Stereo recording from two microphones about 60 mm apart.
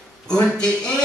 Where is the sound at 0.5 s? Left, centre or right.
Centre.